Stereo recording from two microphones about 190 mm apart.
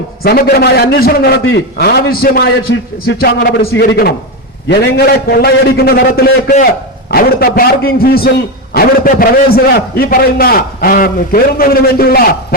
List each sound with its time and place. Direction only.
0.2 s a man's voice: 55° left (ahead or behind)
2.7 s a man's voice: 80° left
3.1 s a man's voice: 65° left (ahead or behind)